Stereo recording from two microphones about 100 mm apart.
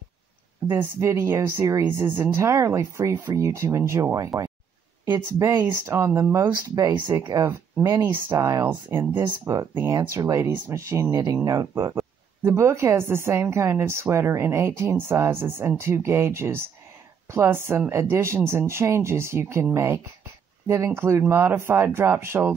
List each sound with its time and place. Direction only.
0.7 s a woman's voice: 25° right (ahead or behind)
5.4 s a woman's voice: 30° right (ahead or behind)
6.4 s speech: 35° right (ahead or behind)
8.0 s speech: 30° right (ahead or behind)
8.6 s a woman's voice: 20° right (ahead or behind)